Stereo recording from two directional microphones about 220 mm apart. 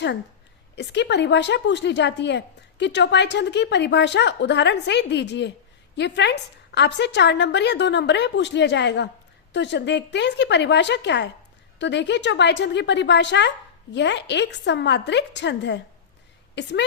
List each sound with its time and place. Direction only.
0.8 s a woman's voice: 50° left (ahead or behind)